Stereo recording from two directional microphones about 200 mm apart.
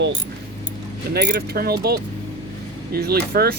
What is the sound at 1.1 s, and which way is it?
Speech, 55° right (ahead or behind).